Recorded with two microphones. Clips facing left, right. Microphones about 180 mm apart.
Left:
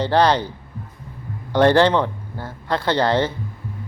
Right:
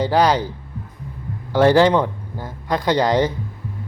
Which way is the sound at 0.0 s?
10° right (ahead or behind).